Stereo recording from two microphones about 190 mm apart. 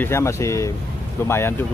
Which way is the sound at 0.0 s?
15° left (ahead or behind).